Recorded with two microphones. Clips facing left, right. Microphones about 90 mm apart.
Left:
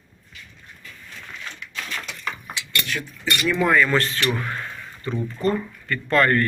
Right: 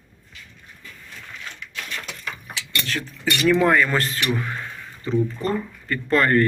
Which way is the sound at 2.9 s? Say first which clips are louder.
Right 2 dB; 35° right (ahead or behind).